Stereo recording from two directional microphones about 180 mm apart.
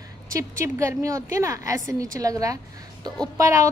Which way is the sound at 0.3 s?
15° right (ahead or behind).